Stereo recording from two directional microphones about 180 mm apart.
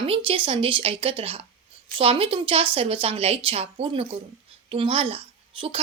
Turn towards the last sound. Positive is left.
turn(degrees=-30)  # may be behind; listen again after turning